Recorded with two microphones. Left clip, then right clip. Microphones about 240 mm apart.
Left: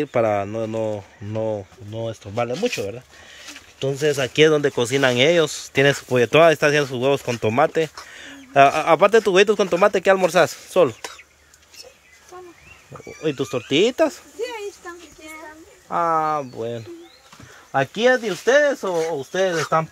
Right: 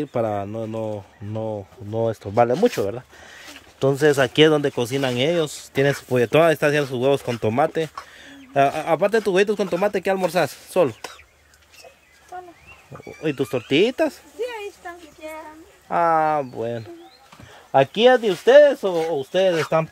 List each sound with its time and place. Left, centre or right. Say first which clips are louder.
0.0 s speech: left 4 dB; centre
1.9 s speech: right 8 dB; right; by 11.0 s centre
13.0 s speech: even; centre
15.9 s speech: right 2 dB; centre